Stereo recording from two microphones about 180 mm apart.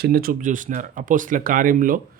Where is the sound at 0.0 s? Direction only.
55° right (ahead or behind).